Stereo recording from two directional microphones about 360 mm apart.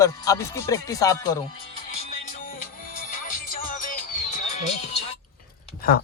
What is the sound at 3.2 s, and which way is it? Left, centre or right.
Music, left.